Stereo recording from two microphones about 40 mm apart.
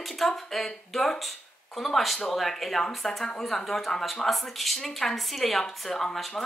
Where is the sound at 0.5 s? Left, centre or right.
Centre.